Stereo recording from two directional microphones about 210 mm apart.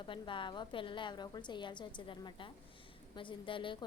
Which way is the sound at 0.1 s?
25° left (ahead or behind).